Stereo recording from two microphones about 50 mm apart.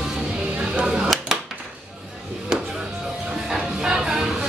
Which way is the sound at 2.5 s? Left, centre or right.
Centre.